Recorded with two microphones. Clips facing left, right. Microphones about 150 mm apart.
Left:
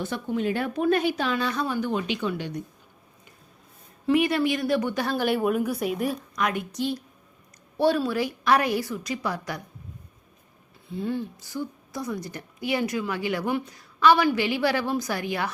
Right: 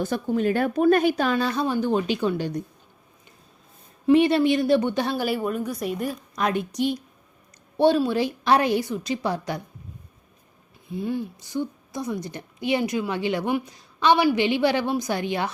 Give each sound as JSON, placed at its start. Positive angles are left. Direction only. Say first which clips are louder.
{"t": 0.0, "sound": "a woman's voice", "louder": "right 4 dB", "side_deg": -40}
{"t": 4.1, "sound": "a woman's voice", "louder": "right 5 dB", "side_deg": -30}
{"t": 5.1, "sound": "speech", "louder": "left 1 dB", "side_deg": -5}
{"t": 5.4, "sound": "speech", "louder": "left 2 dB", "side_deg": 5}
{"t": 6.3, "sound": "a woman's voice", "louder": "right 3 dB", "side_deg": -30}
{"t": 6.7, "sound": "a woman's voice", "louder": "right 3 dB", "side_deg": -15}
{"t": 10.8, "sound": "a woman's voice", "louder": "right 1 dB", "side_deg": -15}